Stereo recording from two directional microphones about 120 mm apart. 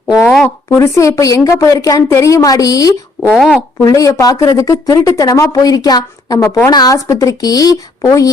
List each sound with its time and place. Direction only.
0.4 s speech: 25° left (ahead or behind)
3.2 s speech: centre (ahead or behind)
3.8 s speech: 25° left (ahead or behind)